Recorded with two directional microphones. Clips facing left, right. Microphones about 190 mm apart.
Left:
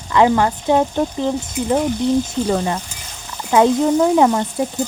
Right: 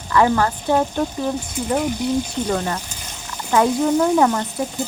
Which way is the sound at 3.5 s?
20° left (ahead or behind).